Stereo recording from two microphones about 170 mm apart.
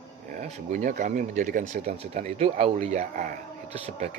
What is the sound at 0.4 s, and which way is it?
Speech, 45° right (ahead or behind).